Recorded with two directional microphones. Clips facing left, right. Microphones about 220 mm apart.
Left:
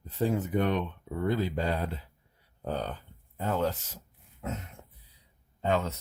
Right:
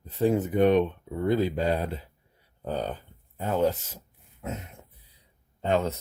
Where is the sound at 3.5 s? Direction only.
15° right (ahead or behind).